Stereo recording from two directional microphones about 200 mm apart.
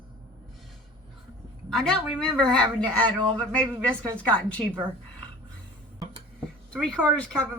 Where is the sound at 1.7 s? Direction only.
5° left (ahead or behind).